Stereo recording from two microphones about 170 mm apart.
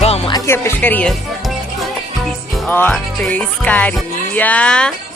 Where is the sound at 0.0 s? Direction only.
40° left (ahead or behind).